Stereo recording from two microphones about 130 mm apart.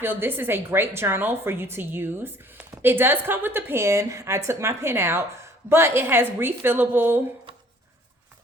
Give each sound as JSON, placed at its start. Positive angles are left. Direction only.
{"t": 0.0, "sound": "a woman's voice", "side_deg": -15}